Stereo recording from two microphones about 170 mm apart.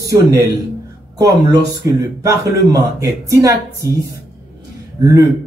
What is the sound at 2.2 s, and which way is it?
Speech, 20° right (ahead or behind).